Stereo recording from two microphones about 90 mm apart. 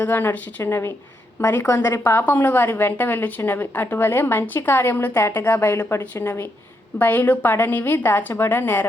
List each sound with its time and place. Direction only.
0.0 s a woman's voice: 20° left (ahead or behind)
1.7 s a woman's voice: 35° left (ahead or behind); by 8.9 s 20° left (ahead or behind)